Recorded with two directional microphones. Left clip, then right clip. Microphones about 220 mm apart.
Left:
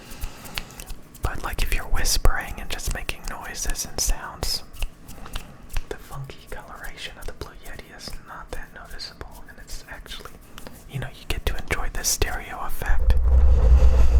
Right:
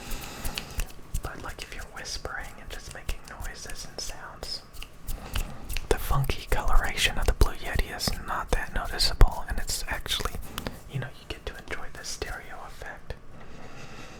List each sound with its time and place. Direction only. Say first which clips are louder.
0.6 s a sound: left 5 dB; 35° left (ahead or behind)
1.2 s whispering: left 8 dB; 25° left (ahead or behind)
5.9 s whispering: right 10 dB; 35° right (ahead or behind)
11.3 s whispering: left 11 dB; 25° left (ahead or behind)
13.7 s vehicle: left 12 dB; 30° left (ahead or behind)